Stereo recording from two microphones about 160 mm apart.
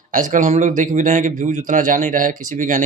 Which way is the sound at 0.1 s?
55° right (ahead or behind).